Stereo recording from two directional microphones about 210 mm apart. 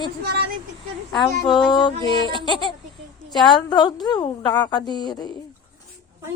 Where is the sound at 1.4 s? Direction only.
20° left (ahead or behind).